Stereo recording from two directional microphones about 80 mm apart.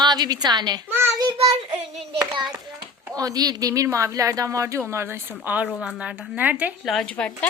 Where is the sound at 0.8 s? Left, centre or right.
Right.